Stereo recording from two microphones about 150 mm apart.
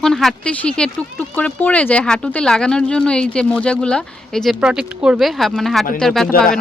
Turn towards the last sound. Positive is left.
turn(degrees=5)  # may be behind; listen again after turning